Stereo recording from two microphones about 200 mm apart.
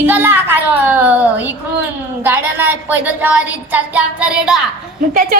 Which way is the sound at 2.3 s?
10° right (ahead or behind).